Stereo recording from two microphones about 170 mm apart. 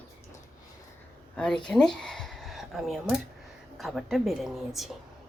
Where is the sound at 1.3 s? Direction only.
5° left (ahead or behind).